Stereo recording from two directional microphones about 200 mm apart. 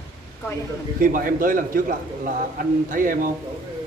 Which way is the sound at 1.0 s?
45° right (ahead or behind).